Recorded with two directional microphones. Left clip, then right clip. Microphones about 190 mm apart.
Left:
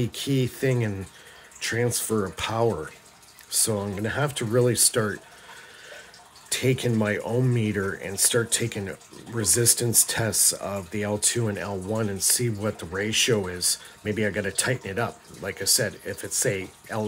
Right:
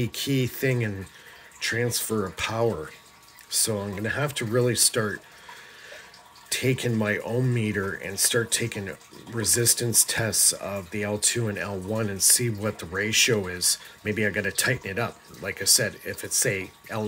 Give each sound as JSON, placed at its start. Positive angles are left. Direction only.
{"t": 0.0, "sound": "speech", "side_deg": 0}
{"t": 6.5, "sound": "speech", "side_deg": 0}